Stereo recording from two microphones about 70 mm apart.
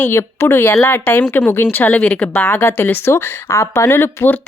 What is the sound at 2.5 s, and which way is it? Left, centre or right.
Speech, left.